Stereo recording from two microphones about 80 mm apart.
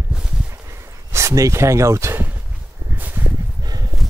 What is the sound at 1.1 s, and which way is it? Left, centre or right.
Speech, right.